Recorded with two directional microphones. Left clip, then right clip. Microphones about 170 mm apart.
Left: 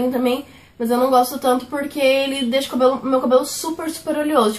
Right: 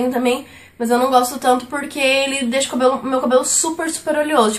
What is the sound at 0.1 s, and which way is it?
A woman's voice, 15° right (ahead or behind).